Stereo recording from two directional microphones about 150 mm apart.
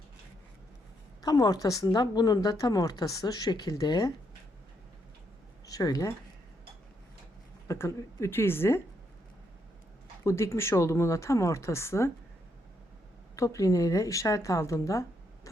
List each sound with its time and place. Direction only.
1.2 s speech: 25° left (ahead or behind)
5.6 s speech: 25° left (ahead or behind)
7.7 s a woman's voice: 20° left (ahead or behind)
10.2 s speech: 20° left (ahead or behind)
13.3 s speech: 20° left (ahead or behind)